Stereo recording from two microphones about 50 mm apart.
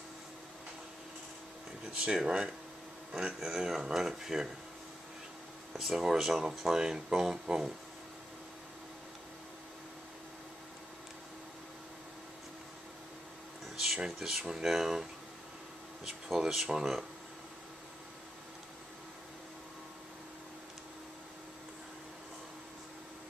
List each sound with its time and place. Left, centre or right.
2.0 s speech: centre
5.7 s speech: centre
13.9 s speech: centre
16.1 s speech: centre